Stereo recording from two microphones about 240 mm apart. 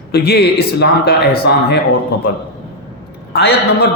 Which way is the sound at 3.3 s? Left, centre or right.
Left.